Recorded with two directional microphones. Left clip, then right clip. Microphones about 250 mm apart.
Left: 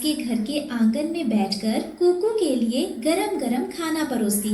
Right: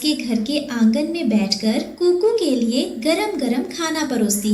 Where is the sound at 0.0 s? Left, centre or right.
Right.